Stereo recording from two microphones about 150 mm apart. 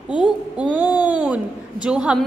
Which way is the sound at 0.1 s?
5° right (ahead or behind).